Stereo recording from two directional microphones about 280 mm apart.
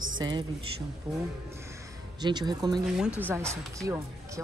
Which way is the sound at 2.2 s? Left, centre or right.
Centre.